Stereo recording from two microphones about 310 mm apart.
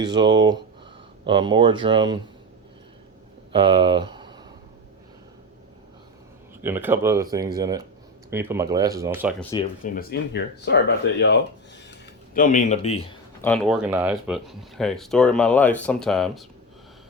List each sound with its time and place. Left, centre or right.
0.0 s speech: centre
3.5 s speech: centre
6.6 s speech: centre
9.5 s speech: centre
9.9 s speech: left
11.9 s a sound: left
13.4 s speech: centre